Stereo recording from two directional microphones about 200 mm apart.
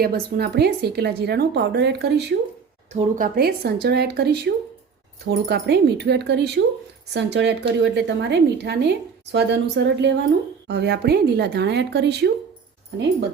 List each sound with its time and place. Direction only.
0.0 s speech: 50° right (ahead or behind)
2.9 s speech: 35° right (ahead or behind)
3.3 s speech: 50° right (ahead or behind)